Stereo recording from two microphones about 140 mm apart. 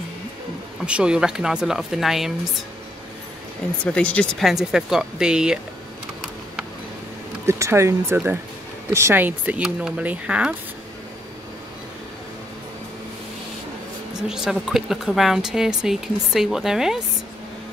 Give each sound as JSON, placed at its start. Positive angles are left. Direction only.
{"t": 0.8, "sound": "a woman's voice", "side_deg": -5}
{"t": 3.8, "sound": "a woman's voice", "side_deg": 10}
{"t": 7.4, "sound": "speech", "side_deg": -20}
{"t": 14.1, "sound": "a woman's voice", "side_deg": -5}